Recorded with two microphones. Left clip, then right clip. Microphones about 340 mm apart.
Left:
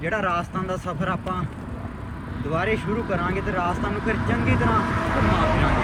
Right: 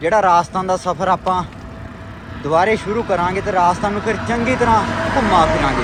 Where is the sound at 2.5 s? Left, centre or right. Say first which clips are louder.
Right 10 dB; centre.